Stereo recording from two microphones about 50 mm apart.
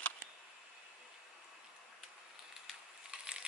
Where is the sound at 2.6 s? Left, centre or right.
Centre.